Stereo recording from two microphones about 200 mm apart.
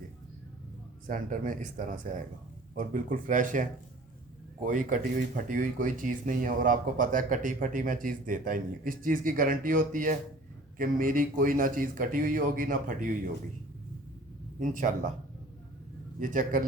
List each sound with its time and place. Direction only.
1.0 s speech: 40° right (ahead or behind)
14.6 s speech: 40° right (ahead or behind)
16.2 s speech: 40° right (ahead or behind)